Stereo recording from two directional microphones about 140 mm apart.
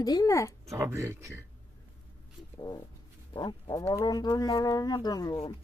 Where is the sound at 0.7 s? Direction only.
20° right (ahead or behind).